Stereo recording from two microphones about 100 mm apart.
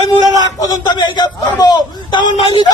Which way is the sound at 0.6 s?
40° left (ahead or behind).